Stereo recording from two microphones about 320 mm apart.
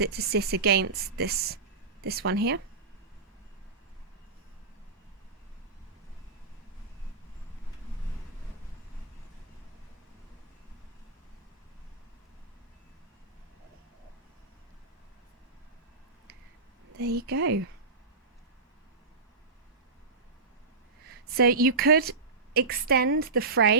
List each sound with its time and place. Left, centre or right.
0.0 s a woman's voice: right
17.0 s a sound: right
21.3 s a woman's voice: right